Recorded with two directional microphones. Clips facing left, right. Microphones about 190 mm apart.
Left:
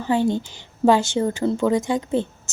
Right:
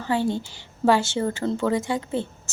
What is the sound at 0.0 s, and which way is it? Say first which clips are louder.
A woman's voice: left 4 dB; 15° left (ahead or behind).